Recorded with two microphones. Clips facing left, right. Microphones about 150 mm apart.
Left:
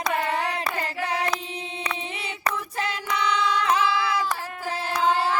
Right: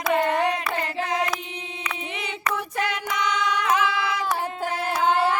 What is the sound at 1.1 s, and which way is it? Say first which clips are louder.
Choir: right 1 dB; 30° left (ahead or behind).